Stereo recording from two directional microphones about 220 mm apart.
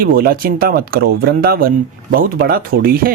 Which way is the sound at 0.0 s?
40° right (ahead or behind).